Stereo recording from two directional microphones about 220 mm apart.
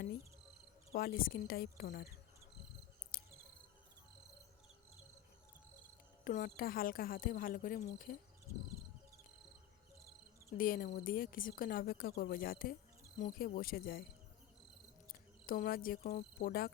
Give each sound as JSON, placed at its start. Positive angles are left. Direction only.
{"t": 0.9, "sound": "speech", "side_deg": 40}
{"t": 3.1, "sound": "cricket", "side_deg": 45}
{"t": 6.2, "sound": "a woman's voice", "side_deg": 40}
{"t": 10.6, "sound": "a woman's voice", "side_deg": 40}
{"t": 15.1, "sound": "speech", "side_deg": 40}